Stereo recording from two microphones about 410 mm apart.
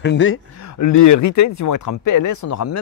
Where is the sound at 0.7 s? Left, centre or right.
Left.